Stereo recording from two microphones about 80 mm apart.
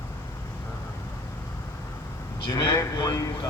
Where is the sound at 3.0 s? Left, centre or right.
Left.